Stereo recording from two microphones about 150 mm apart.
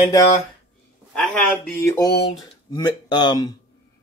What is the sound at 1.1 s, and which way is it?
Speech, 10° left (ahead or behind).